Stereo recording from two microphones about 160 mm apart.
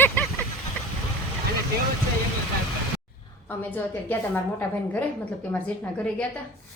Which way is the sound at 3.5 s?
10° left (ahead or behind).